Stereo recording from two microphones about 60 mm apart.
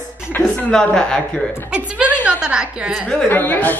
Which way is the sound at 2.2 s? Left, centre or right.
Centre.